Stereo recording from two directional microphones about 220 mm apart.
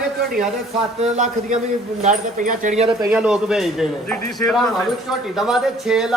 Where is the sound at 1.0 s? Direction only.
30° right (ahead or behind).